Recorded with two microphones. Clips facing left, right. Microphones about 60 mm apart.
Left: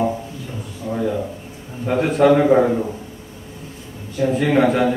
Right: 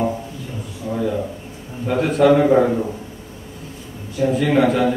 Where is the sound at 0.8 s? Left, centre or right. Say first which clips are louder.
Even; centre.